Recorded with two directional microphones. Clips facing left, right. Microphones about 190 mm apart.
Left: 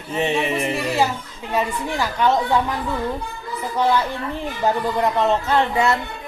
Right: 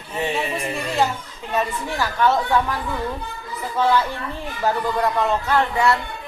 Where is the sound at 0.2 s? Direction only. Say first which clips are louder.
Left 3 dB; 20° left (ahead or behind).